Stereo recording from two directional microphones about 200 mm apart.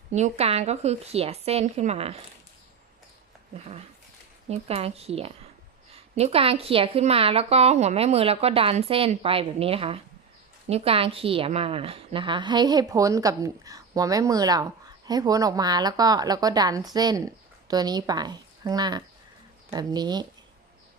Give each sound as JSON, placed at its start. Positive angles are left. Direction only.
{"t": 0.1, "sound": "speech", "side_deg": -35}
{"t": 4.4, "sound": "a woman's voice", "side_deg": -30}